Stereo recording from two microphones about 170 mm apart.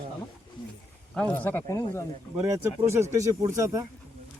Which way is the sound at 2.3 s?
15° right (ahead or behind).